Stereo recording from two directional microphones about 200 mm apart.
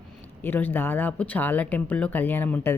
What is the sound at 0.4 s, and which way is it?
Speech, 10° left (ahead or behind).